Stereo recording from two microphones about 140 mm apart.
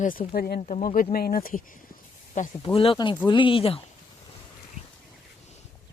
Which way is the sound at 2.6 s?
40° left (ahead or behind).